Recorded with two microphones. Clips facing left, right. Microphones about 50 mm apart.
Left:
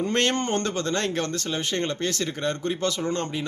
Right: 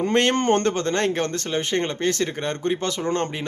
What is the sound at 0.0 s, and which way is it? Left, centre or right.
Speech, right.